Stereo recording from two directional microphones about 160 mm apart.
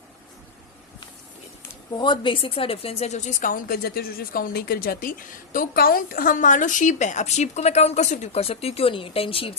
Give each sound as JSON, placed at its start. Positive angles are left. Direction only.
{"t": 2.0, "sound": "speech", "side_deg": 30}